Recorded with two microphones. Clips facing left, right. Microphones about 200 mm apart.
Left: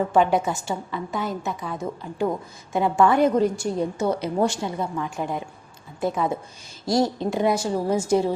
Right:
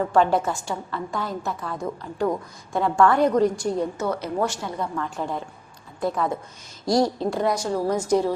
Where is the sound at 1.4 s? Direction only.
Centre (ahead or behind).